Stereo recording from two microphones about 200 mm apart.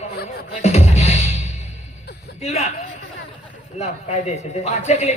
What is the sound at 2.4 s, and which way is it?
Speech, 35° left (ahead or behind).